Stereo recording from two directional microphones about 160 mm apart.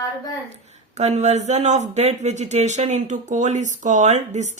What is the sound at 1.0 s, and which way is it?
Speech, 45° right (ahead or behind).